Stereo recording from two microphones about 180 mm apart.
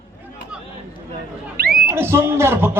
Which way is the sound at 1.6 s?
55° right (ahead or behind).